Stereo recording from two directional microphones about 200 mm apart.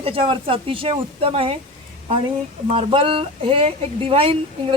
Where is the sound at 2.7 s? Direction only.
25° right (ahead or behind).